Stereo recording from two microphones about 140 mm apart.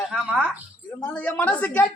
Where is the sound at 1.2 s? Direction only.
10° left (ahead or behind).